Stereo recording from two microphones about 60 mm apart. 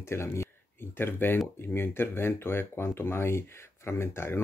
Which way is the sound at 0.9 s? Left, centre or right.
Left.